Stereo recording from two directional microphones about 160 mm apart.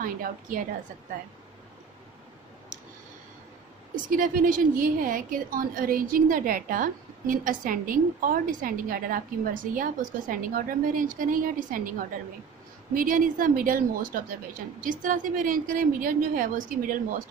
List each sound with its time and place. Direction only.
0.0 s a woman's voice: 60° right (ahead or behind)
3.9 s a woman's voice: 60° right (ahead or behind)
12.9 s a woman's voice: 60° right (ahead or behind)